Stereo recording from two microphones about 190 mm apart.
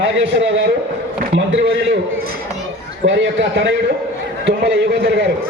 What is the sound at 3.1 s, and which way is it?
A man's voice, 70° right (ahead or behind).